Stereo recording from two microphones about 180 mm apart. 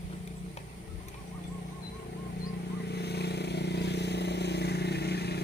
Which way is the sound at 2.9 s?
65° left (ahead or behind).